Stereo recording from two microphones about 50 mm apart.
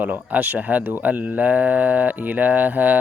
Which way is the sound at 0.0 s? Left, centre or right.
Right.